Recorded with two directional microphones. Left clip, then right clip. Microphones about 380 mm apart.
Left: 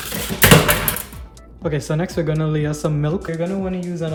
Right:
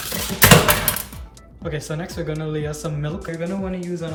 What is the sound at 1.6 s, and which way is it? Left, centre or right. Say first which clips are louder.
Speech: left 6 dB; centre.